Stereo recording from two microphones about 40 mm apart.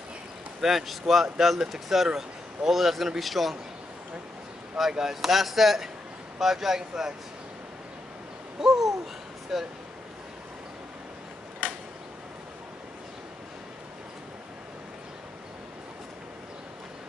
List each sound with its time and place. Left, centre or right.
0.6 s a man's voice: centre
4.9 s a man's voice: centre
8.5 s speech: centre
11.6 s creak: left